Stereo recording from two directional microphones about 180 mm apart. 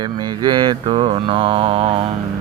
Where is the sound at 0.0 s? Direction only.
25° right (ahead or behind).